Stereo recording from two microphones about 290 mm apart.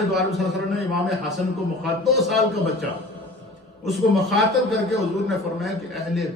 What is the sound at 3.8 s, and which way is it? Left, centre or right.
A man's voice, centre.